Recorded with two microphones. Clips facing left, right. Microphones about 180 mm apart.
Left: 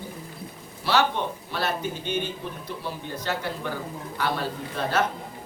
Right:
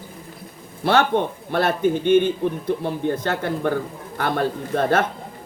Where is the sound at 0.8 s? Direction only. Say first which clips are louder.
Right 5 dB; 55° right (ahead or behind).